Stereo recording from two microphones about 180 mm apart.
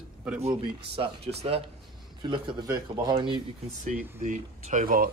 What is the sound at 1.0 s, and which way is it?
A man's voice, 35° right (ahead or behind).